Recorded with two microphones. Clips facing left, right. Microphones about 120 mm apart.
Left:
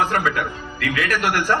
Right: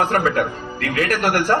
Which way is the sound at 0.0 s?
40° right (ahead or behind).